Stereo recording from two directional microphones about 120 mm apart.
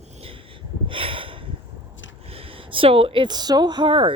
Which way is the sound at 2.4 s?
50° right (ahead or behind).